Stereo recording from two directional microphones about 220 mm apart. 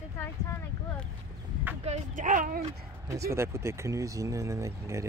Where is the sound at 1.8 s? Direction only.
35° right (ahead or behind).